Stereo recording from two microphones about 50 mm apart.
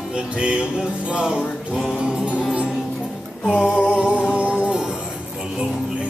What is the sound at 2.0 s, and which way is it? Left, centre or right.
Music, centre.